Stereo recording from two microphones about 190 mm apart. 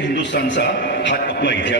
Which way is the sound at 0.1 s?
70° left (ahead or behind).